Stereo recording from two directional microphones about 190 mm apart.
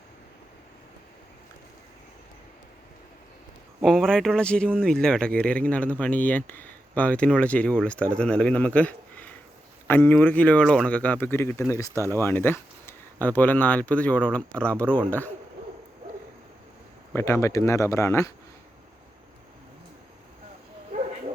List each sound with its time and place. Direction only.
3.8 s speech: centre (ahead or behind)
11.9 s speech: 15° right (ahead or behind)
12.1 s speech: 10° left (ahead or behind)
17.2 s speech: 15° left (ahead or behind)